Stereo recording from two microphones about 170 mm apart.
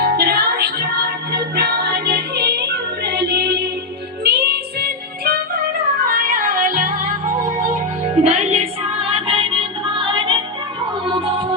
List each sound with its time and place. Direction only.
0.0 s music: 65° right (ahead or behind)
6.1 s music: 55° right (ahead or behind); by 10.4 s 30° right (ahead or behind)